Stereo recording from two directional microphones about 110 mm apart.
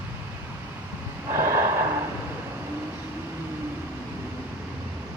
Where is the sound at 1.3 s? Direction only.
25° right (ahead or behind).